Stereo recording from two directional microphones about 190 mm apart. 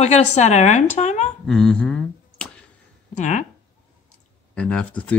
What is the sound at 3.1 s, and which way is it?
Speech, 40° left (ahead or behind).